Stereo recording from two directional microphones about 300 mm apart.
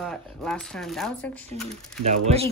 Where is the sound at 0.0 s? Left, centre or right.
Centre.